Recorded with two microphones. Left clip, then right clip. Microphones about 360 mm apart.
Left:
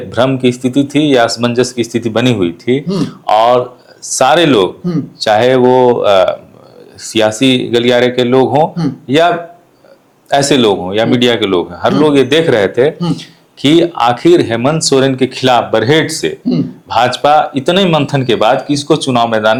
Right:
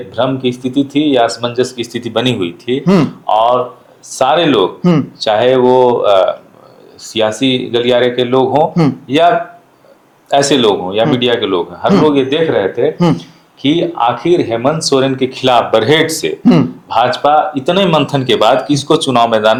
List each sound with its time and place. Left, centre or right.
0.1 s speech: left
4.8 s speech: centre
5.2 s speech: left